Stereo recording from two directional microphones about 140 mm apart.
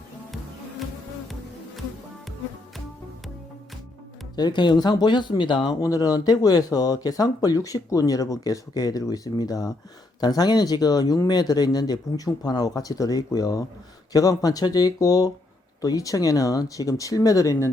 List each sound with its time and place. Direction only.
4.4 s speech: 30° left (ahead or behind)